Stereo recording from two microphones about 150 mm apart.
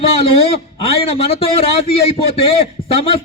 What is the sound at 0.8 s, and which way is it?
A man's voice, 40° left (ahead or behind).